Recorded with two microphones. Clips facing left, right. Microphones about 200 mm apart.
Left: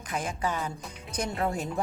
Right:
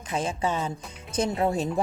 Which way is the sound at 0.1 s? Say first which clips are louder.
Right 4 dB; 25° right (ahead or behind).